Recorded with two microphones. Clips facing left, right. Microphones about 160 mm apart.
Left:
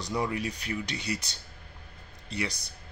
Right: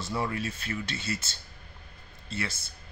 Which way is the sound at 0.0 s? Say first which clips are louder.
Left 1 dB; 15° left (ahead or behind).